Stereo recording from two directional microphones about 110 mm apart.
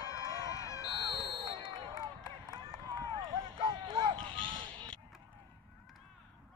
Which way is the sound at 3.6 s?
40° right (ahead or behind).